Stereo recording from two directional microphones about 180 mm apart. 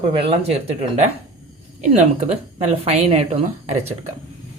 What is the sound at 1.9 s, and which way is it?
A woman's voice, 40° right (ahead or behind).